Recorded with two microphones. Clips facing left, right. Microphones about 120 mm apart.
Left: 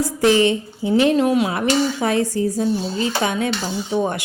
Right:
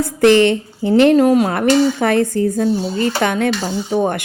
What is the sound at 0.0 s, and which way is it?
A woman's voice, 60° right (ahead or behind).